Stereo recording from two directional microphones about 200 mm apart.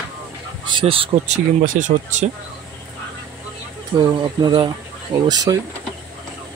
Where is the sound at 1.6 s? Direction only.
40° right (ahead or behind).